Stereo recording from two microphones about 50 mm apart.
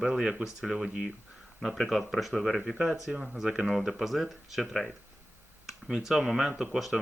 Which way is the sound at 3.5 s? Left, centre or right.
Centre.